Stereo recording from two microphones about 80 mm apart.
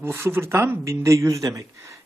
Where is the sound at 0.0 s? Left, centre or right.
Right.